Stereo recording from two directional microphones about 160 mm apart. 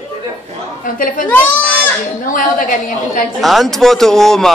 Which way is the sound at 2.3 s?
60° left (ahead or behind).